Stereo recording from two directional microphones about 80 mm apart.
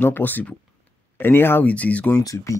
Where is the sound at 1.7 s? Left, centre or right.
Centre.